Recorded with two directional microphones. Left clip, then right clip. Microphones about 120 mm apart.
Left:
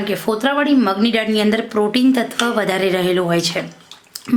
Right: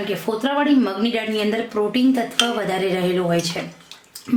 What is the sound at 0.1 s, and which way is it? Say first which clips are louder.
Speech: left 5 dB; 40° left (ahead or behind).